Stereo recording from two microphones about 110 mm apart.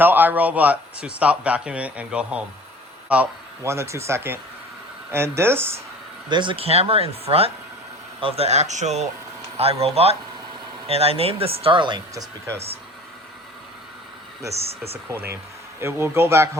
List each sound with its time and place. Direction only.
0.0 s speech: 15° right (ahead or behind)
3.6 s speech: 25° right (ahead or behind)
6.2 s speech: 45° right (ahead or behind); by 9.0 s 90° right
9.6 s speech: 65° right (ahead or behind); by 12.0 s 45° right (ahead or behind)
12.1 s speech: 30° right (ahead or behind)
12.5 s speech: 70° right (ahead or behind)
14.5 s speech: 65° right (ahead or behind)
15.8 s speech: 25° right (ahead or behind)